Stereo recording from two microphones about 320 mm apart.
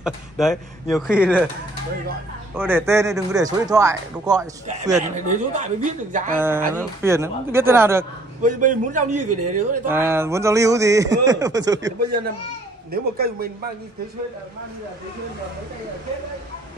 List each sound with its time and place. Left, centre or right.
0.0 s speech: centre
2.5 s speech: centre
5.0 s a man's voice: right
6.3 s speech: centre
8.4 s a man's voice: right
9.1 s speech: right
9.8 s speech: centre
12.9 s a man's voice: right